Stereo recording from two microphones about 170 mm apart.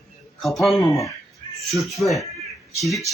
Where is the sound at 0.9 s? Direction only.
15° left (ahead or behind).